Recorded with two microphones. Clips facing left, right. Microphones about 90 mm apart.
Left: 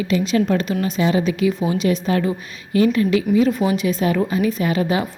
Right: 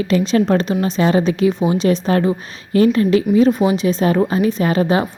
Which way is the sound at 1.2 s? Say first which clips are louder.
Right 3 dB; 30° right (ahead or behind).